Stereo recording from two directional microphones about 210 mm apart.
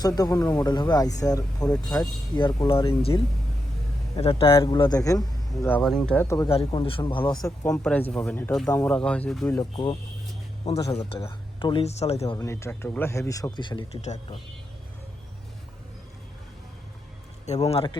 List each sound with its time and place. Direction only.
0.2 s a man's voice: 15° left (ahead or behind)
4.2 s a man's voice: 25° left (ahead or behind)
7.7 s a man's voice: 5° left (ahead or behind)
9.6 s speech: 20° left (ahead or behind)
12.2 s a man's voice: 15° left (ahead or behind); by 14.3 s 30° left (ahead or behind)
17.7 s speech: 25° left (ahead or behind)